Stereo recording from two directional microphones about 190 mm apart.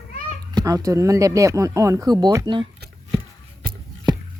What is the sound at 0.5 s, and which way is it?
Speech, 20° right (ahead or behind).